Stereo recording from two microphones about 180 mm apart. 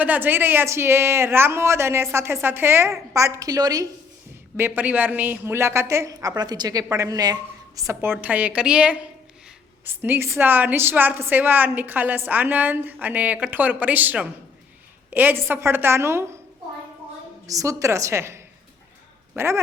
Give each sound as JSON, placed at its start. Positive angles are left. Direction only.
{"t": 0.0, "sound": "a woman's voice", "side_deg": -10}
{"t": 17.4, "sound": "a woman's voice", "side_deg": -20}